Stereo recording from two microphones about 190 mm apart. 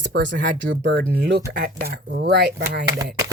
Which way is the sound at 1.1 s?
55° right (ahead or behind).